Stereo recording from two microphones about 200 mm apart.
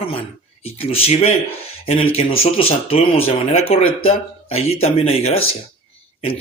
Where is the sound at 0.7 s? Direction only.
30° left (ahead or behind).